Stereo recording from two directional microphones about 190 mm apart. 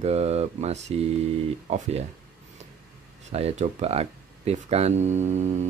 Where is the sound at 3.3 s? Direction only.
35° right (ahead or behind).